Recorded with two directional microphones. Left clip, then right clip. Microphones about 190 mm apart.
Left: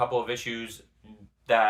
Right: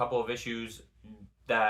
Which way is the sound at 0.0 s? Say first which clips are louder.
Left 3 dB; 15° left (ahead or behind).